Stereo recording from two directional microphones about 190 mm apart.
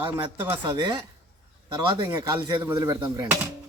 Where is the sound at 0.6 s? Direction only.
25° right (ahead or behind).